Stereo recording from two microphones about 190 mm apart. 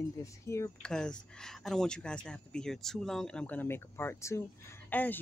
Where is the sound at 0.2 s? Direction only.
15° left (ahead or behind).